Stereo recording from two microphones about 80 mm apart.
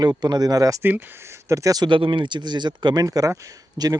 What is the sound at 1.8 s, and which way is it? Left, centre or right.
Speech, right.